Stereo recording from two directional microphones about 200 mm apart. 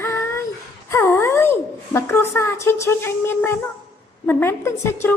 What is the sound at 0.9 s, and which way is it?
A man's voice, 15° left (ahead or behind).